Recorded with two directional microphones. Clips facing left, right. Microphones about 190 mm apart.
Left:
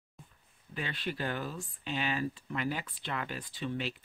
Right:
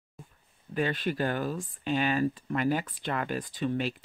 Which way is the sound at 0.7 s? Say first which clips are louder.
Right 8 dB; 50° right (ahead or behind).